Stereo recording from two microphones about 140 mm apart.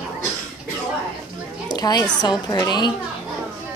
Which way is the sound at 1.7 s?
30° left (ahead or behind).